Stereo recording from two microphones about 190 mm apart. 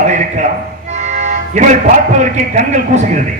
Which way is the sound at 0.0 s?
40° right (ahead or behind).